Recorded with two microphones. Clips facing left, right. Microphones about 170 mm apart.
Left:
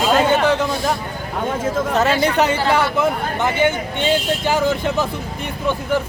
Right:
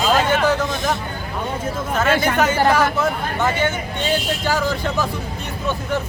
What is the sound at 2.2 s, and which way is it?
Speech, 30° left (ahead or behind).